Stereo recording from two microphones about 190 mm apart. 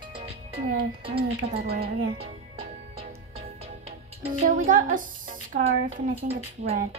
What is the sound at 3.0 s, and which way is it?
Music, 30° right (ahead or behind).